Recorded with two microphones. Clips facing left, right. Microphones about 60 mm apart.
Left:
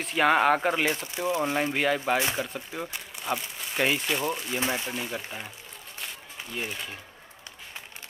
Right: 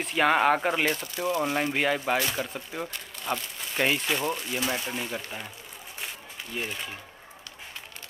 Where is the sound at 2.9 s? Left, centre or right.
Centre.